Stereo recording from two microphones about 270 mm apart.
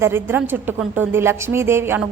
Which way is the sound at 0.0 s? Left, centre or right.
Centre.